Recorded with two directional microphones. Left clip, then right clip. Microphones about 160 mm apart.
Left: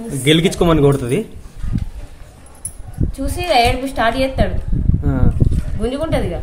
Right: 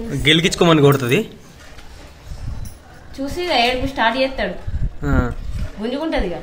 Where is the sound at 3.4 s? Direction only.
90° left.